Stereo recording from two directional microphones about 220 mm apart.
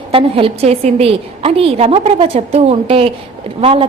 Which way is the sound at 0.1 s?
25° right (ahead or behind).